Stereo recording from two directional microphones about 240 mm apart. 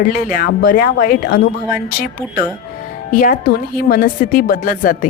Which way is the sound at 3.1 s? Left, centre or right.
Left.